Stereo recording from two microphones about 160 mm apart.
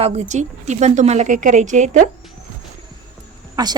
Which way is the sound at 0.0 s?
45° right (ahead or behind).